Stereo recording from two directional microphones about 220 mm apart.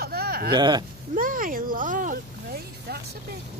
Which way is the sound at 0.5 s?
20° right (ahead or behind).